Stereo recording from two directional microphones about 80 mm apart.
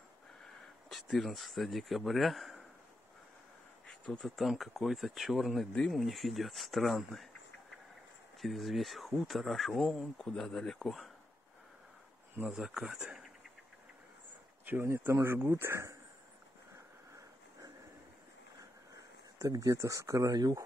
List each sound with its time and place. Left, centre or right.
0.8 s speech: centre
3.8 s a sound: centre
4.2 s speech: centre
8.4 s speech: centre
12.4 s speech: centre
14.6 s a sound: right
14.9 s speech: right
17.1 s a sound: right
20.2 s speech: right